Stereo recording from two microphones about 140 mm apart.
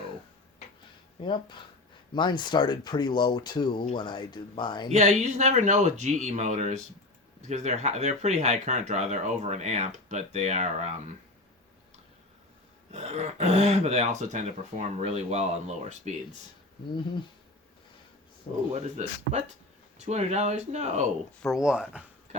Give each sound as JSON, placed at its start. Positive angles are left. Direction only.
{"t": 1.2, "sound": "speech", "side_deg": 35}
{"t": 4.9, "sound": "speech", "side_deg": -55}
{"t": 12.9, "sound": "speech", "side_deg": -50}
{"t": 18.7, "sound": "speech", "side_deg": -55}
{"t": 21.4, "sound": "speech", "side_deg": -5}